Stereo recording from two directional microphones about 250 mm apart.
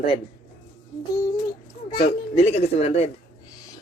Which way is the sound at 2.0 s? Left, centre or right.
Left.